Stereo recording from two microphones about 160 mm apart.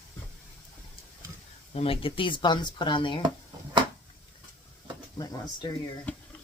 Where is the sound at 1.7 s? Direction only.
35° left (ahead or behind).